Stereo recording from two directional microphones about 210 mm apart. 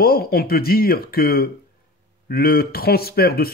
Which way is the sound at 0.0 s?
45° left (ahead or behind).